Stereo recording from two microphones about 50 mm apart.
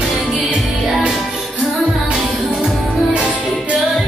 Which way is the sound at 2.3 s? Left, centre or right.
Centre.